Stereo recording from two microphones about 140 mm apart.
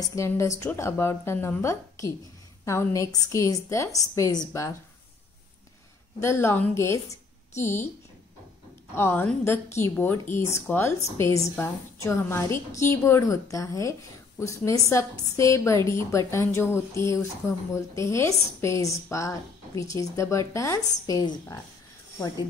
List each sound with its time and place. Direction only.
0.0 s speech: 20° left (ahead or behind)
6.2 s a woman's voice: 15° left (ahead or behind)
8.9 s a woman's voice: 15° left (ahead or behind)